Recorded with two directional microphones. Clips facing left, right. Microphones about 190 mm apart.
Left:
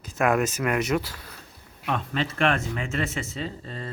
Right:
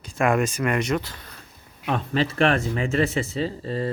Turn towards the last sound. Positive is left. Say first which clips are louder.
# right 7 dB
turn(degrees=-35)  # may be behind; listen again after turning